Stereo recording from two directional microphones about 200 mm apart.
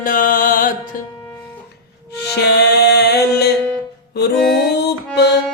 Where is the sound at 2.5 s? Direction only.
55° left (ahead or behind).